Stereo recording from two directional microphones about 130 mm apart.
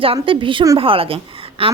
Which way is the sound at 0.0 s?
45° right (ahead or behind).